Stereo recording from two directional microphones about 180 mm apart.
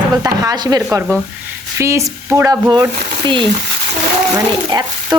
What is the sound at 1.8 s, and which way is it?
Speech, 15° right (ahead or behind).